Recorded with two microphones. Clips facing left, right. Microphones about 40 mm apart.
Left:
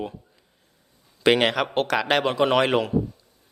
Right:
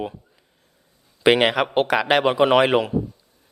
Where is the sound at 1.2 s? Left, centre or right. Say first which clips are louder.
Right 3 dB; centre.